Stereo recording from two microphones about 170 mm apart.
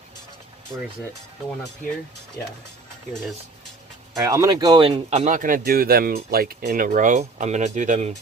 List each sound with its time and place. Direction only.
4.2 s speech: 20° right (ahead or behind); by 8.1 s 45° right (ahead or behind)